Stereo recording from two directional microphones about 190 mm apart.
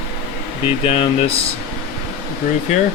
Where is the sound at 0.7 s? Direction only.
30° left (ahead or behind).